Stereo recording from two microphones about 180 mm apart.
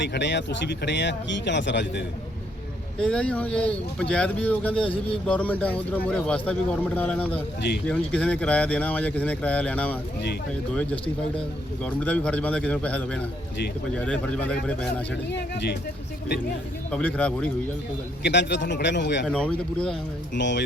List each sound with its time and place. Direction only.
0.0 s speech: 75° left (ahead or behind)
3.0 s speech: 5° left (ahead or behind)
15.3 s speech: 65° left (ahead or behind)
16.9 s speech: 10° left (ahead or behind)
18.2 s speech: 70° left (ahead or behind)
19.2 s speech: 5° left (ahead or behind)
20.3 s speech: 80° left